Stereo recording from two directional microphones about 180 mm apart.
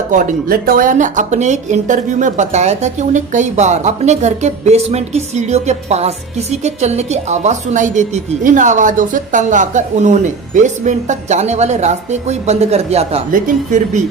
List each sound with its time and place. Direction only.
0.1 s speech: 45° right (ahead or behind)